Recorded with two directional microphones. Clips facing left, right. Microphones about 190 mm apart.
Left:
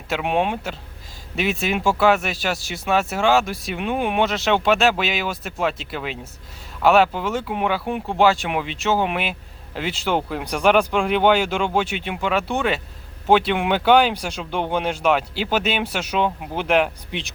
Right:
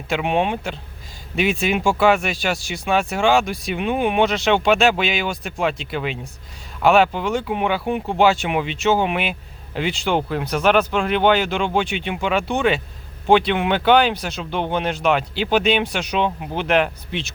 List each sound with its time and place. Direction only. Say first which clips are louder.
0.1 s speech: right 1 dB; centre (ahead or behind)